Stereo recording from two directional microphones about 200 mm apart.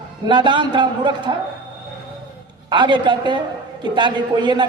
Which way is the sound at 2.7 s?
25° right (ahead or behind).